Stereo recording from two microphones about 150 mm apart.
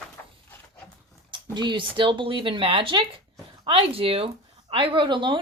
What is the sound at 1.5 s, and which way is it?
Speech, 30° right (ahead or behind).